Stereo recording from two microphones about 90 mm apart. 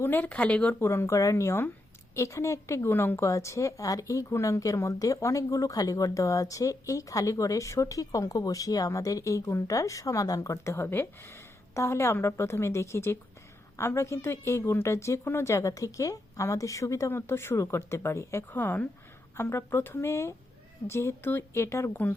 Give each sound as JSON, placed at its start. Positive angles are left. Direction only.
{"t": 0.0, "sound": "speech", "side_deg": 20}
{"t": 0.8, "sound": "a woman's voice", "side_deg": 30}